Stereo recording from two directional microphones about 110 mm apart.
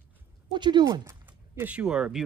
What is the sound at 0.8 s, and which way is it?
Speech, 30° right (ahead or behind).